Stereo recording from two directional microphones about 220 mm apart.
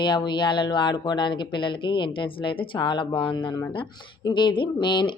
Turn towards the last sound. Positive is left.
turn(degrees=20)  # may be behind; listen again after turning